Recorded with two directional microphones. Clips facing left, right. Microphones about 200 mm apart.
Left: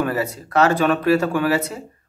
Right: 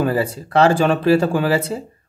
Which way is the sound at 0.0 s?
30° right (ahead or behind).